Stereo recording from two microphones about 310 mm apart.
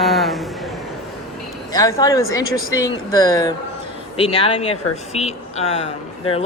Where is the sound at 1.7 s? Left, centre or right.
Centre.